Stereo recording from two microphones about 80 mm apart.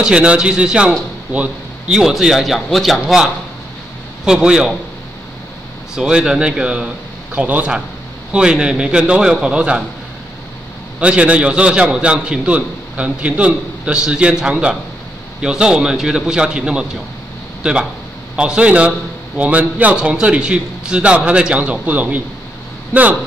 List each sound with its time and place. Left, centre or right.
0.0 s a man's voice: centre
1.3 s a sound: centre
2.0 s a man's voice: centre
5.9 s a man's voice: centre
11.0 s a man's voice: centre
18.3 s a man's voice: centre